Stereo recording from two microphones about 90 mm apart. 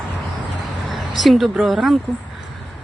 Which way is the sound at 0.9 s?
Centre (ahead or behind).